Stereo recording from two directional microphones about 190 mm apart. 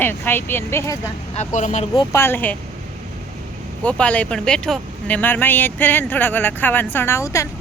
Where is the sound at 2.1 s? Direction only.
10° left (ahead or behind).